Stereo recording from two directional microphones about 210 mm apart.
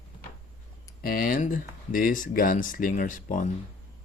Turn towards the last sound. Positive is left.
turn(degrees=40)  # may be behind; listen again after turning